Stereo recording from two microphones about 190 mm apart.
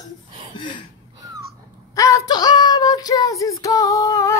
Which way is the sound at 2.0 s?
15° left (ahead or behind).